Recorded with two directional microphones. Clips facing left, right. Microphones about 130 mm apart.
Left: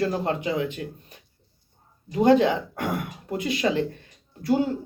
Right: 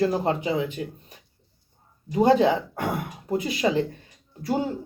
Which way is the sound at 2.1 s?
30° right (ahead or behind).